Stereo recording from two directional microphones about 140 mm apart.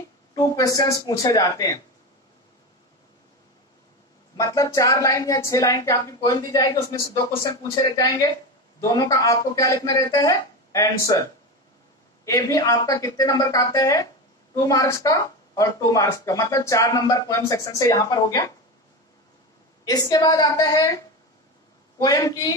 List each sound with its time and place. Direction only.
0.3 s speech: 25° left (ahead or behind)
4.4 s speech: 20° left (ahead or behind)
8.9 s speech: 25° left (ahead or behind)
12.3 s speech: 25° left (ahead or behind)
19.8 s speech: 30° left (ahead or behind)